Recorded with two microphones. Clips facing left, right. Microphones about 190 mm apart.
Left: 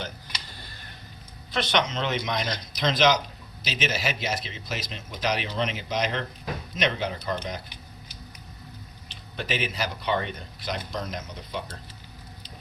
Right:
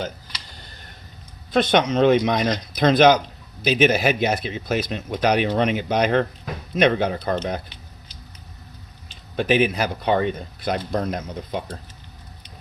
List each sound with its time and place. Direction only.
1.5 s speech: 50° right (ahead or behind)
9.3 s speech: 50° right (ahead or behind)